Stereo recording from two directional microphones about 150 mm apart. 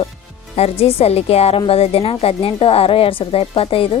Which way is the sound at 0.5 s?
40° left (ahead or behind).